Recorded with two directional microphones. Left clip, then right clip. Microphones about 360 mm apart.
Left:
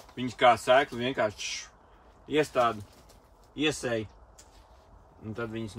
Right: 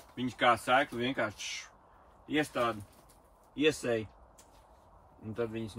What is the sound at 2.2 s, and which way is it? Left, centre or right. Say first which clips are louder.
Speech: left 6 dB; centre.